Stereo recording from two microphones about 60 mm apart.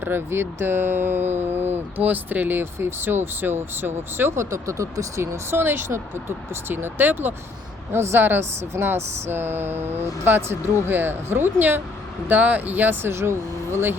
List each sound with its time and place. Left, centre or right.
0.0 s speech: right